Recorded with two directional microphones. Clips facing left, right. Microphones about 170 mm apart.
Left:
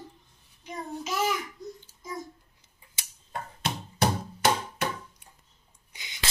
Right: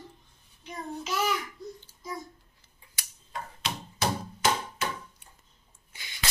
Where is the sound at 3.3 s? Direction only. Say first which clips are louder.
Left 3 dB; 55° left (ahead or behind).